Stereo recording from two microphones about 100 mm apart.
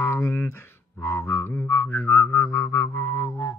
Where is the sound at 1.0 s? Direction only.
25° left (ahead or behind).